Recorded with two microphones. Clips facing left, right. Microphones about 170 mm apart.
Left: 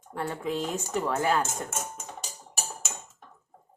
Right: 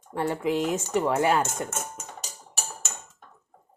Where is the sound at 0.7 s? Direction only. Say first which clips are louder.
Right 5 dB; centre (ahead or behind).